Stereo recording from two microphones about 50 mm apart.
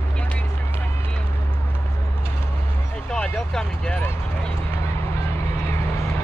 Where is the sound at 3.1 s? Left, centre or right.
Centre.